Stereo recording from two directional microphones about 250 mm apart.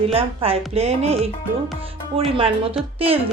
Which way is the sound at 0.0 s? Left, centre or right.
Right.